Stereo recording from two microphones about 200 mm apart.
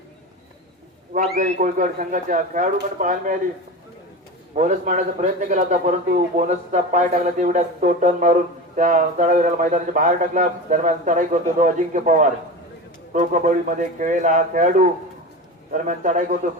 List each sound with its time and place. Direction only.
1.1 s speech: 40° right (ahead or behind)
4.5 s speech: 40° right (ahead or behind)
15.7 s speech: 40° right (ahead or behind)